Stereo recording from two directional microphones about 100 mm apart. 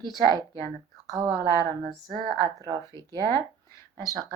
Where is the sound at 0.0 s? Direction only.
45° right (ahead or behind).